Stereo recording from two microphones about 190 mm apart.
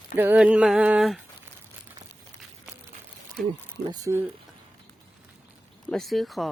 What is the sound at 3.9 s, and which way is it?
Speech, 15° right (ahead or behind).